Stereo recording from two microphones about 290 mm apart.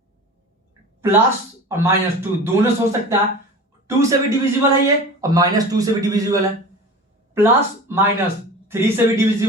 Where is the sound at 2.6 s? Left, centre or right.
Centre.